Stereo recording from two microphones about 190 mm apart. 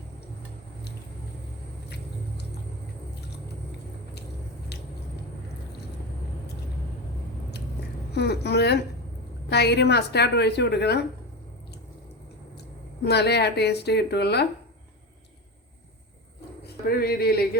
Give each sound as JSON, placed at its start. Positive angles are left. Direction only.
{"t": 8.1, "sound": "speech", "side_deg": 60}
{"t": 13.1, "sound": "speech", "side_deg": 60}
{"t": 16.6, "sound": "speech", "side_deg": 55}